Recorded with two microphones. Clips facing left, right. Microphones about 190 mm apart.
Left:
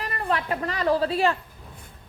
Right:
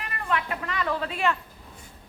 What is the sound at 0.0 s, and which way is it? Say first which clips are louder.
A woman's voice: left 2 dB; 35° left (ahead or behind).